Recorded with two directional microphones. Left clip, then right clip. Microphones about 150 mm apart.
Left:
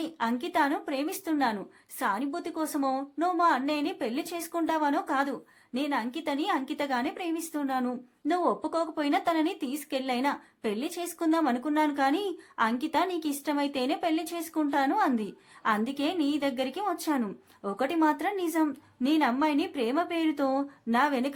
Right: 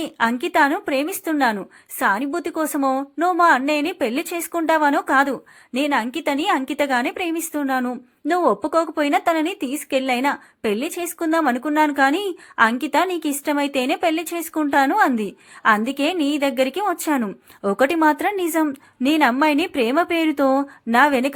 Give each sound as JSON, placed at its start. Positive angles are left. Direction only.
{"t": 0.0, "sound": "a woman's voice", "side_deg": -35}